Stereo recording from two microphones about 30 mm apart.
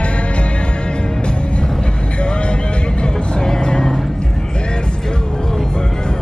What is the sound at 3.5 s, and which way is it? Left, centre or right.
Vehicle, left.